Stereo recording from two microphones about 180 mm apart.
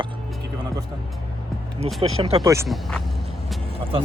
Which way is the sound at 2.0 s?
30° right (ahead or behind).